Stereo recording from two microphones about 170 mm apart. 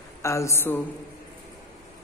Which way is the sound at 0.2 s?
15° left (ahead or behind).